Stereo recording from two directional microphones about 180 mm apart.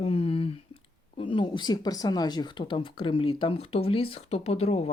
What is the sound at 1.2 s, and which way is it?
Speech, 30° left (ahead or behind).